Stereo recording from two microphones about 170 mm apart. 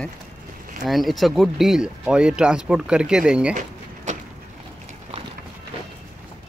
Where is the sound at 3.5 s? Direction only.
45° right (ahead or behind).